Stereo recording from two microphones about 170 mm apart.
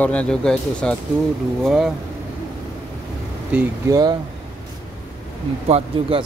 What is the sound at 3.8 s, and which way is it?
Speech, 25° right (ahead or behind).